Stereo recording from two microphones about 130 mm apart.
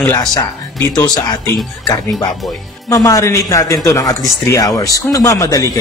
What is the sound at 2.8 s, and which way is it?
Speech, 25° left (ahead or behind).